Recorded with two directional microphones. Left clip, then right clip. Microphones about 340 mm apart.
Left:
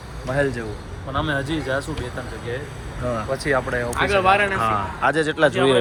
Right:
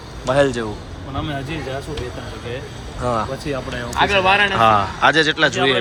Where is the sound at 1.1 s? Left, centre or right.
Centre.